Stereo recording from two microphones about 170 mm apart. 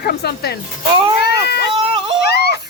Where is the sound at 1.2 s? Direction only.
75° left (ahead or behind).